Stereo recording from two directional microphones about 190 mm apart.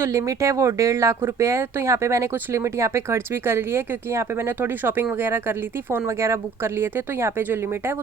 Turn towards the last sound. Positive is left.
turn(degrees=-10)  # may be behind; listen again after turning